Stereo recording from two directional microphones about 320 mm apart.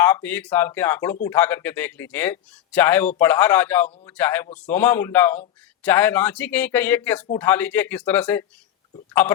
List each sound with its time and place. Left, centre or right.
0.0 s speech: centre
9.2 s a man's voice: left